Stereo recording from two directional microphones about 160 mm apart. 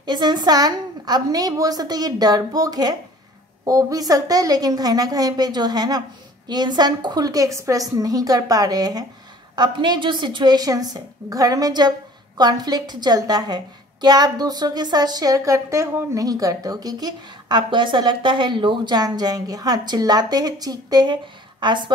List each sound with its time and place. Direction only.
0.0 s a woman's voice: 25° right (ahead or behind)